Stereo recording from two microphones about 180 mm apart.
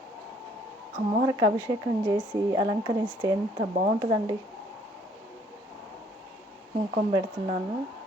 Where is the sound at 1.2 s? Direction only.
20° right (ahead or behind).